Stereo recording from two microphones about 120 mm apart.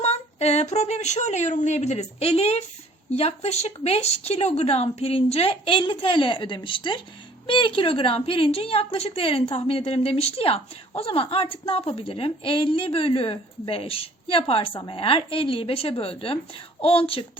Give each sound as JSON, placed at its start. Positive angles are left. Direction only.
{"t": 0.0, "sound": "a woman's voice", "side_deg": 65}